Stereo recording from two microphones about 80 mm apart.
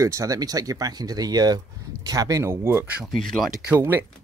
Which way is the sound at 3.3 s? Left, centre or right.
Centre.